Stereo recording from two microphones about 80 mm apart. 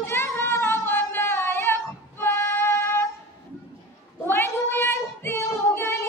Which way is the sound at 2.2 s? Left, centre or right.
Left.